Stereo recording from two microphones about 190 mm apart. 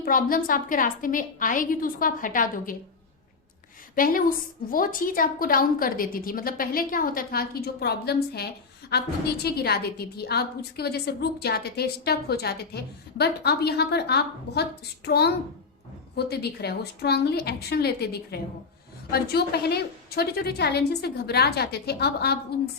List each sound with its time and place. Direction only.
0.0 s a woman's voice: 45° left (ahead or behind)
3.9 s a woman's voice: 50° left (ahead or behind)